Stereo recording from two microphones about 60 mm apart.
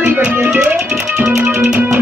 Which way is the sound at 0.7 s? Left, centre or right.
Centre.